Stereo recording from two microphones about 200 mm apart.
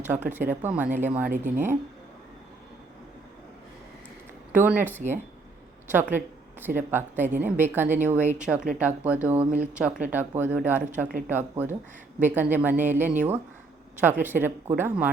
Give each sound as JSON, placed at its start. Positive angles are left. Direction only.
{"t": 0.0, "sound": "speech", "side_deg": -10}
{"t": 1.3, "sound": "speech", "side_deg": -40}
{"t": 4.5, "sound": "speech", "side_deg": -10}